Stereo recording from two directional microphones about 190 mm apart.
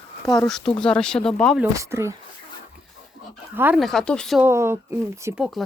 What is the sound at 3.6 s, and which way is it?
Speech, 10° right (ahead or behind).